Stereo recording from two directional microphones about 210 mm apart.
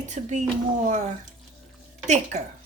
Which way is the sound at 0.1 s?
35° right (ahead or behind).